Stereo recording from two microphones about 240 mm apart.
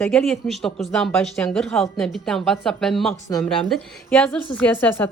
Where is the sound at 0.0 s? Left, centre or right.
Centre.